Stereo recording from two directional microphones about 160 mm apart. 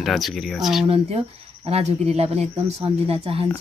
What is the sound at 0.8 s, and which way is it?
Speech, 40° right (ahead or behind).